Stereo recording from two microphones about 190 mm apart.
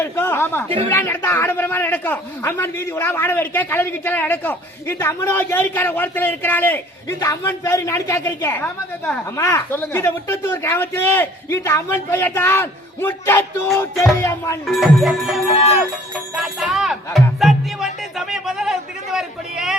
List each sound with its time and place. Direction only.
0.0 s a man's voice: 10° left (ahead or behind)
14.7 s a man's voice: centre (ahead or behind)